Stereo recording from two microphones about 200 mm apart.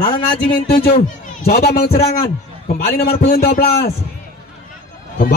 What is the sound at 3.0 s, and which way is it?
Speech, 50° left (ahead or behind).